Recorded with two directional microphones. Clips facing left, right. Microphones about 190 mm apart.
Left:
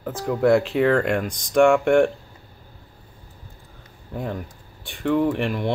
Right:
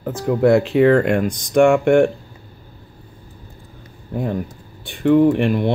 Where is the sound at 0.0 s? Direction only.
5° right (ahead or behind).